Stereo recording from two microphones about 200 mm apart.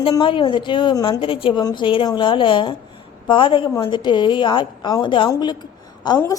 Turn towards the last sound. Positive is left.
turn(degrees=15)  # may be behind; listen again after turning